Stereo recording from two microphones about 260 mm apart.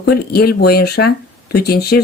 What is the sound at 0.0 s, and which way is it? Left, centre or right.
Speech, left.